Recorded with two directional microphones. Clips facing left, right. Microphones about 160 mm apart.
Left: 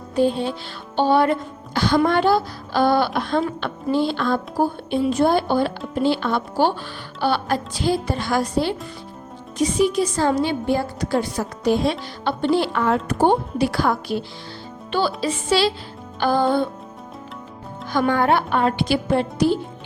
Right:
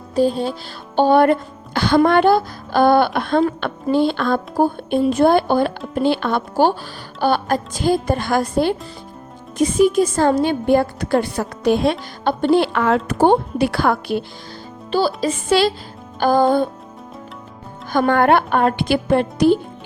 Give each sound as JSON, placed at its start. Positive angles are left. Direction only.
{"t": 0.2, "sound": "music", "side_deg": -40}
{"t": 0.9, "sound": "a woman's voice", "side_deg": -50}
{"t": 14.9, "sound": "a woman's voice", "side_deg": -40}
{"t": 17.9, "sound": "a woman's voice", "side_deg": -55}